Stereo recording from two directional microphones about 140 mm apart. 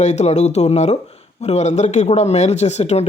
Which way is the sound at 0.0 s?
55° left (ahead or behind).